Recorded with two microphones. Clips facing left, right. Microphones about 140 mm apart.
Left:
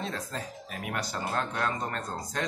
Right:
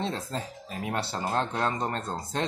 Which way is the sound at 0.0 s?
25° right (ahead or behind).